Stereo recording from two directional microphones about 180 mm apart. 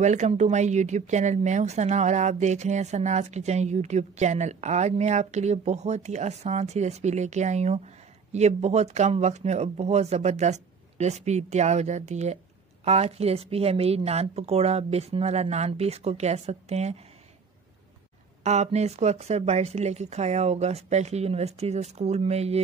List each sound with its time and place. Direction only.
0.0 s speech: 40° right (ahead or behind)
18.4 s speech: 40° right (ahead or behind)